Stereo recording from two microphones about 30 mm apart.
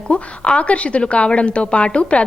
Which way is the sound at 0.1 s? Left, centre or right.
Left.